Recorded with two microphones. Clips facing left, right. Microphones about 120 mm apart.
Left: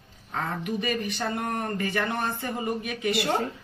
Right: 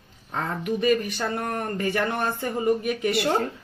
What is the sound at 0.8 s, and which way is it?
Speech, 50° right (ahead or behind).